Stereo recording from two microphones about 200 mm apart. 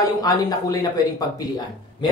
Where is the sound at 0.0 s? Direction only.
20° left (ahead or behind).